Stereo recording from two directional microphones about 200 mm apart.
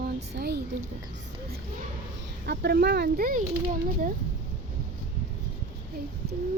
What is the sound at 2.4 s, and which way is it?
Speech, 55° right (ahead or behind).